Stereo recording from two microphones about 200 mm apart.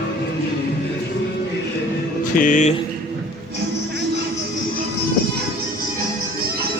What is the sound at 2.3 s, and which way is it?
Speech, 40° left (ahead or behind).